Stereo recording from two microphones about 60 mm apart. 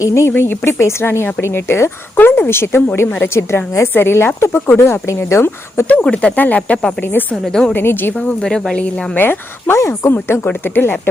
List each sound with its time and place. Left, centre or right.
0.0 s speech: left
0.3 s speech: left
5.9 s speech: centre
6.6 s speech: centre
7.7 s speech: left
8.4 s speech: centre
9.1 s speech: left
9.7 s speech: left
10.1 s speech: left